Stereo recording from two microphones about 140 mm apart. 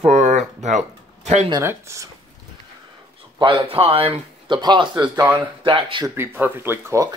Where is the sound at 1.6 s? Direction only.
20° right (ahead or behind).